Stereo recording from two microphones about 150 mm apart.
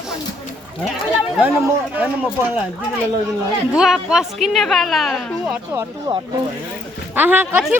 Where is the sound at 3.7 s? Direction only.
5° right (ahead or behind).